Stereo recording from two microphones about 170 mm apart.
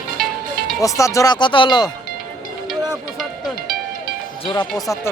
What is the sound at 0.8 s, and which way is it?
Speech, 20° left (ahead or behind).